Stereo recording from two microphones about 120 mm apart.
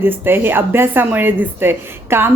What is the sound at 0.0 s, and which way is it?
Speech, 20° right (ahead or behind).